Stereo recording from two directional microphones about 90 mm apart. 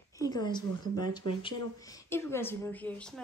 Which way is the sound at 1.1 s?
65° left (ahead or behind).